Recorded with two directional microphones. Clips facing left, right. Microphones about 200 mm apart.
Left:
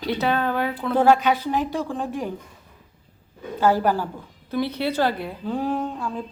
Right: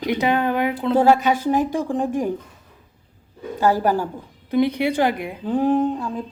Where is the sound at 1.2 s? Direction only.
45° right (ahead or behind).